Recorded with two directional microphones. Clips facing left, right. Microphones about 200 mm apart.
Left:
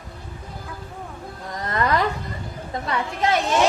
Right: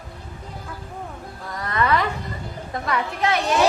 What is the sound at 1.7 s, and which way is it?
Speech, 40° left (ahead or behind).